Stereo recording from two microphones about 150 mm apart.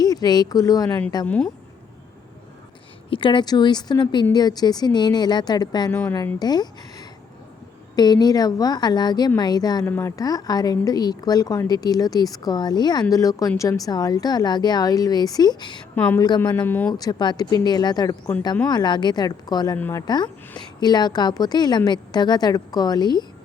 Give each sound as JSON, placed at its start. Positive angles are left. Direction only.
{"t": 0.0, "sound": "speech", "side_deg": 25}
{"t": 0.9, "sound": "speech", "side_deg": 10}
{"t": 3.1, "sound": "speech", "side_deg": 35}
{"t": 5.9, "sound": "speech", "side_deg": 10}
{"t": 6.4, "sound": "speech", "side_deg": 25}
{"t": 9.8, "sound": "speech", "side_deg": 15}
{"t": 16.0, "sound": "speech", "side_deg": 10}
{"t": 16.9, "sound": "speech", "side_deg": 25}
{"t": 19.7, "sound": "speech", "side_deg": 15}
{"t": 20.1, "sound": "speech", "side_deg": 30}